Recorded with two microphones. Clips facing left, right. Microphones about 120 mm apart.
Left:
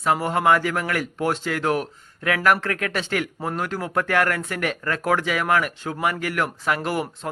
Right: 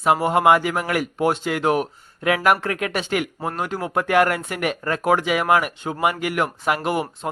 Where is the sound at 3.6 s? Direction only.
5° right (ahead or behind).